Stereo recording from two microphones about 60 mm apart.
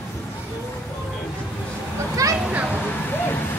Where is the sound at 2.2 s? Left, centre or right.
Right.